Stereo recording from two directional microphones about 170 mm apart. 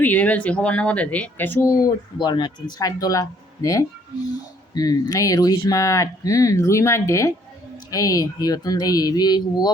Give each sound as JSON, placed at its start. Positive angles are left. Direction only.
{"t": 0.0, "sound": "speech", "side_deg": 10}